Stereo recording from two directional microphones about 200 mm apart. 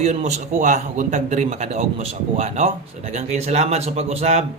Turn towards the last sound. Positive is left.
turn(degrees=-30)  # may be behind; listen again after turning